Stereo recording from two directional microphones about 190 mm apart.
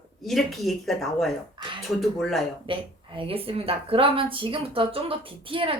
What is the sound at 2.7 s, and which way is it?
Speech, 30° right (ahead or behind).